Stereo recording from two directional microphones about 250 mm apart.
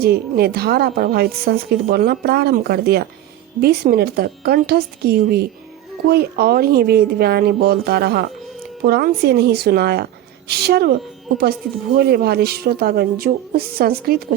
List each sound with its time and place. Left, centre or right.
0.0 s a woman's voice: right
11.9 s a woman's voice: right